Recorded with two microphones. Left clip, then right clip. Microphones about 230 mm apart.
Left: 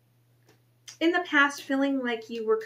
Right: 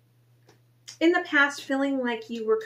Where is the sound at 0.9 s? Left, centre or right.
Centre.